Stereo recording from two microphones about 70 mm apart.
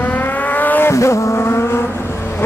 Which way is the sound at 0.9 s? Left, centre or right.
Left.